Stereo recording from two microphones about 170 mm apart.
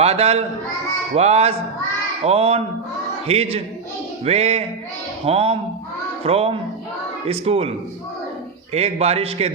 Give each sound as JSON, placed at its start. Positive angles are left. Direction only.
{"t": 0.0, "sound": "a man's voice", "side_deg": -35}
{"t": 8.7, "sound": "a man's voice", "side_deg": -40}